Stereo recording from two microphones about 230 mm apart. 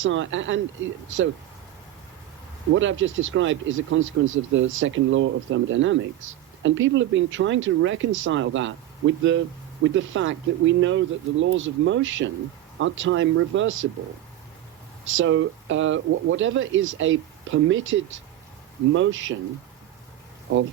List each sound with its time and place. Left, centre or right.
0.0 s speech: right
2.7 s speech: right
15.0 s speech: right